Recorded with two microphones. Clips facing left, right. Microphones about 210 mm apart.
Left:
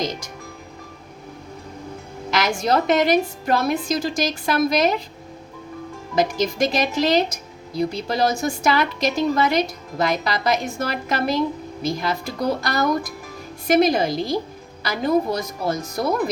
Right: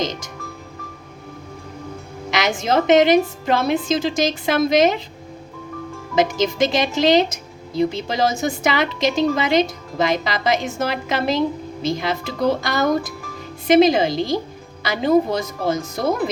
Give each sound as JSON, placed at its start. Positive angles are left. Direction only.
{"t": 2.5, "sound": "a woman's voice", "side_deg": -20}
{"t": 6.1, "sound": "a woman's voice", "side_deg": -20}